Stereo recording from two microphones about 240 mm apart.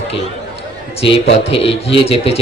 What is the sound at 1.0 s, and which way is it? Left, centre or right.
A man's voice, left.